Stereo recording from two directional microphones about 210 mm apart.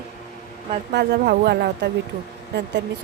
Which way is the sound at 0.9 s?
50° right (ahead or behind).